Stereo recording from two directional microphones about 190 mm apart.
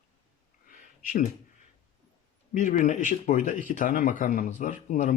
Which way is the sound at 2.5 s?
40° left (ahead or behind).